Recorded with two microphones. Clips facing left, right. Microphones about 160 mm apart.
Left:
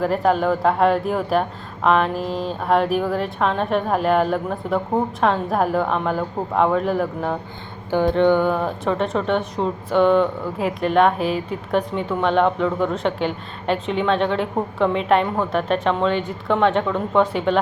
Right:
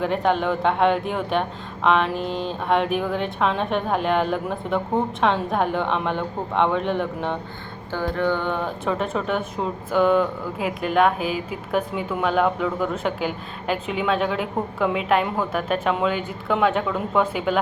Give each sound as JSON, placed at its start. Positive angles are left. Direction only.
{"t": 0.0, "sound": "speech", "side_deg": 0}
{"t": 7.9, "sound": "a sound", "side_deg": 20}
{"t": 8.4, "sound": "speech", "side_deg": 5}